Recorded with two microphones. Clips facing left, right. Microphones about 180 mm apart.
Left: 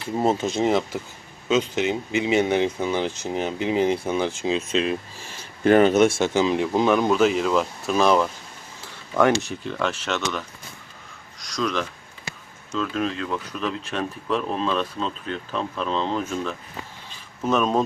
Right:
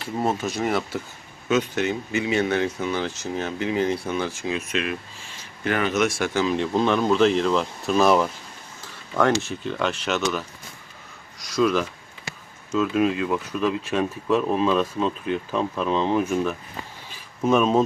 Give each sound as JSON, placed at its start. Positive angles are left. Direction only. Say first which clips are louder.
{"t": 0.2, "sound": "speech", "louder": "left 3 dB", "side_deg": 25}
{"t": 9.2, "sound": "speech", "louder": "left 1 dB", "side_deg": 15}
{"t": 9.6, "sound": "speech", "louder": "right 1 dB", "side_deg": 0}
{"t": 11.5, "sound": "speech", "louder": "right 5 dB", "side_deg": -5}
{"t": 17.1, "sound": "a sound", "louder": "right 3 dB", "side_deg": -10}